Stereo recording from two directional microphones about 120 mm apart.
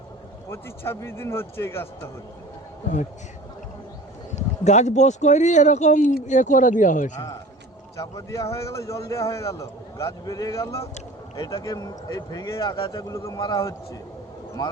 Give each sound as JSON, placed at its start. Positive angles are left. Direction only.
{"t": 0.5, "sound": "a man's voice", "side_deg": 20}
{"t": 4.4, "sound": "speech", "side_deg": 75}
{"t": 7.9, "sound": "a man's voice", "side_deg": 25}
{"t": 12.6, "sound": "a man's voice", "side_deg": 45}
{"t": 12.9, "sound": "speech", "side_deg": 30}
{"t": 14.6, "sound": "speech", "side_deg": 35}